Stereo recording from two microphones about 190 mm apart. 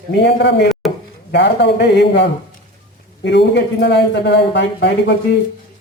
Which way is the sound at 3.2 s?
65° left (ahead or behind).